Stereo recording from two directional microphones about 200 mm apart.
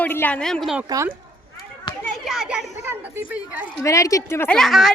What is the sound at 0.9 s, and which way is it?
Speech, 15° right (ahead or behind).